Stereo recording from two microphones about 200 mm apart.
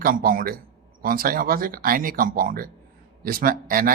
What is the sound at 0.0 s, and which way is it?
Speech, 45° right (ahead or behind).